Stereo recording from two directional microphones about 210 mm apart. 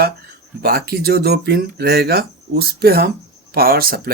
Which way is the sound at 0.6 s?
45° right (ahead or behind).